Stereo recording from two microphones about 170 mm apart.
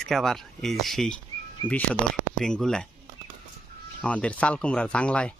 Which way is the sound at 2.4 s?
5° left (ahead or behind).